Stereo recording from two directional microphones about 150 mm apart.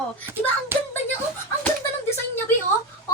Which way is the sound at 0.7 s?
15° right (ahead or behind).